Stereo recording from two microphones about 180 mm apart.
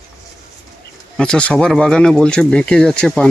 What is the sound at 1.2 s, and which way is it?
Speech, 5° left (ahead or behind).